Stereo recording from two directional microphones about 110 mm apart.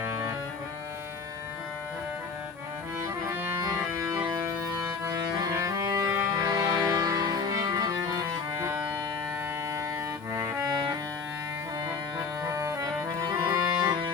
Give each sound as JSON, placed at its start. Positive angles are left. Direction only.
{"t": 0.0, "sound": "music", "side_deg": -20}
{"t": 3.2, "sound": "music", "side_deg": -25}
{"t": 10.3, "sound": "music", "side_deg": -30}
{"t": 12.5, "sound": "music", "side_deg": -30}